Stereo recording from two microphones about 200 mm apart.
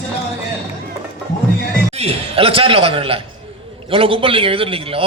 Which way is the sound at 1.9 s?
30° right (ahead or behind).